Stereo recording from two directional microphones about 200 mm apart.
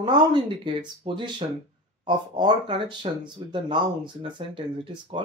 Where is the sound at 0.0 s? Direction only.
25° right (ahead or behind).